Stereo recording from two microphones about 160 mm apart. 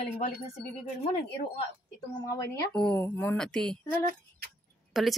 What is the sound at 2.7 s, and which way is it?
A woman's voice, 5° left (ahead or behind).